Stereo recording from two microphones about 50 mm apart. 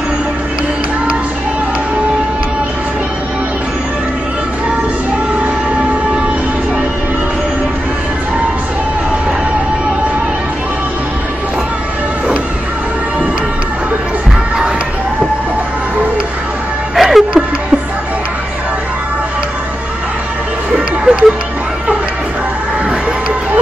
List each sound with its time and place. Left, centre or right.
16.9 s music: centre
20.7 s music: centre